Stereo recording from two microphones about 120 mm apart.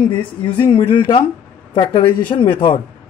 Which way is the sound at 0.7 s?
40° left (ahead or behind).